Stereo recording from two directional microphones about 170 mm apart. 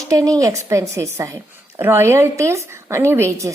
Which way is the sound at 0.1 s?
20° right (ahead or behind).